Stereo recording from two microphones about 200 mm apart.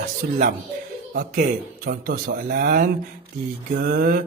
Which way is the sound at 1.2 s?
45° right (ahead or behind).